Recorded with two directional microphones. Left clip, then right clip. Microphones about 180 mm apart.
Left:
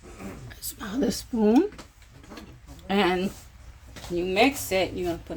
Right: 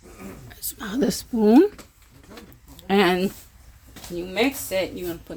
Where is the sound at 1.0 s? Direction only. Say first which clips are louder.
Right 3 dB; 65° right (ahead or behind).